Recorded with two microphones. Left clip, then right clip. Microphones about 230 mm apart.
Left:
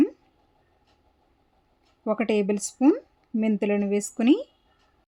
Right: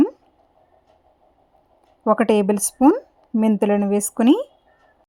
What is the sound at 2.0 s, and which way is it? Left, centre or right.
A woman's voice, right.